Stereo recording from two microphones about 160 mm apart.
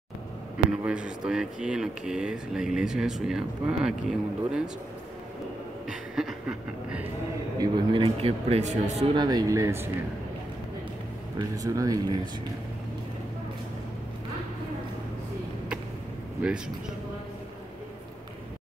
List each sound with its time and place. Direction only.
0.7 s speech: 5° right (ahead or behind)
5.9 s a sound: centre (ahead or behind)
7.5 s speech: 25° right (ahead or behind); by 9.0 s 45° right (ahead or behind)
9.1 s speech: 25° right (ahead or behind)
11.3 s speech: 20° right (ahead or behind)